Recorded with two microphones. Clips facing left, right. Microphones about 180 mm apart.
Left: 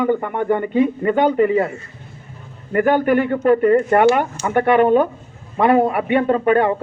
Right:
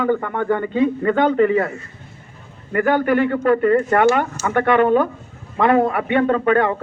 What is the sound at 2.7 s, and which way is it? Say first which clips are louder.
A man's voice: left 2 dB; 15° left (ahead or behind).